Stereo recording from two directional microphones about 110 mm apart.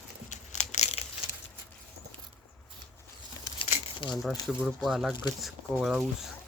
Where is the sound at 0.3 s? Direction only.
90° left.